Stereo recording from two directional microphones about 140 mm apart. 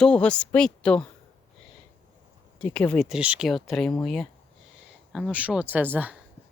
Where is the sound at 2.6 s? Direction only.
10° left (ahead or behind).